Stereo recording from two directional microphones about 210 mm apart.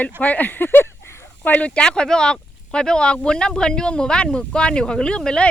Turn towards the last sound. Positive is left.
turn(degrees=5)  # may be behind; listen again after turning